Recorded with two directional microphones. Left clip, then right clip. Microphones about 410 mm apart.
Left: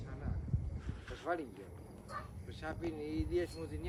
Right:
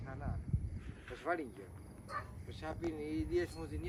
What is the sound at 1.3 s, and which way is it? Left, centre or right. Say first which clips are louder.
Speech: right 1 dB; centre.